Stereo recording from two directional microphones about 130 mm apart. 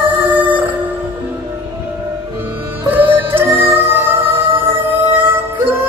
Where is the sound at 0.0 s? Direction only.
15° right (ahead or behind).